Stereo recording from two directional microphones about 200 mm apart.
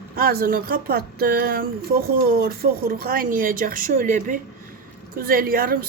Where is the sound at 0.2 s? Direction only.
50° right (ahead or behind).